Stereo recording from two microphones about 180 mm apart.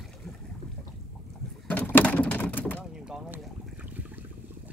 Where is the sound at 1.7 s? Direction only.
10° left (ahead or behind).